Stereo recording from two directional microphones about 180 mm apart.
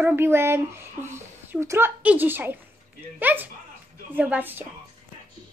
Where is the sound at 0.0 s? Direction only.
10° right (ahead or behind).